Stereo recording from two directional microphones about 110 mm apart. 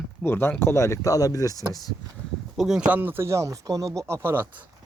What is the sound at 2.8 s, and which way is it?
Speech, 15° right (ahead or behind).